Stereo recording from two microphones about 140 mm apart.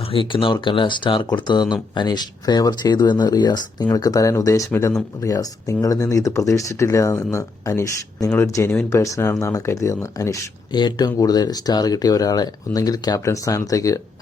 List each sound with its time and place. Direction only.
0.0 s speech: 40° left (ahead or behind)